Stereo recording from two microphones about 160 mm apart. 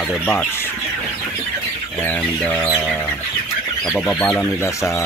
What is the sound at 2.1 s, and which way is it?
Speech, 10° left (ahead or behind).